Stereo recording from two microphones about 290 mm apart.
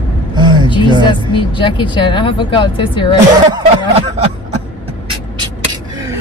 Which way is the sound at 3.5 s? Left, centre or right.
Centre.